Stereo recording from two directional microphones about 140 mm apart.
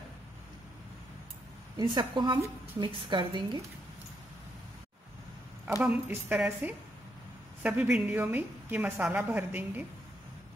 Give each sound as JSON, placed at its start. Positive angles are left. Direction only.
{"t": 1.8, "sound": "a woman's voice", "side_deg": -30}
{"t": 5.8, "sound": "a woman's voice", "side_deg": -10}